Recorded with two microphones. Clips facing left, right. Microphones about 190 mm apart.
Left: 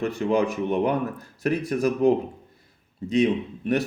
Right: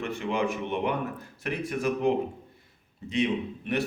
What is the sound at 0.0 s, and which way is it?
A man's voice, 40° left (ahead or behind).